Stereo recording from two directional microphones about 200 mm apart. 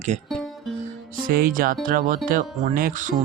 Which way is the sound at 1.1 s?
45° right (ahead or behind).